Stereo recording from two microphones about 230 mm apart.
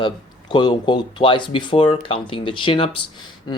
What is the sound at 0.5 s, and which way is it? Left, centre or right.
Speech, centre.